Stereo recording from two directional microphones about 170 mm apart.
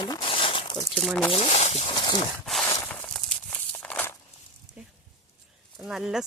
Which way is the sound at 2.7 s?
10° left (ahead or behind).